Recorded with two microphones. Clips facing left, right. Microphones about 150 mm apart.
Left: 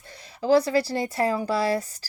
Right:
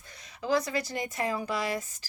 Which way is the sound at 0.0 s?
30° left (ahead or behind).